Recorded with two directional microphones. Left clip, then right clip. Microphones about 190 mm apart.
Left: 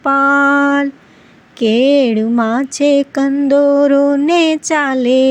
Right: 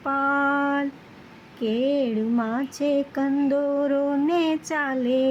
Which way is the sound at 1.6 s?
35° left (ahead or behind).